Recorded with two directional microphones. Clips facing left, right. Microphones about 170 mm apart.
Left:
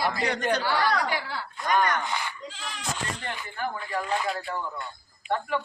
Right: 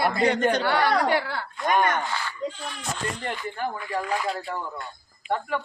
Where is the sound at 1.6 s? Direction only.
20° right (ahead or behind).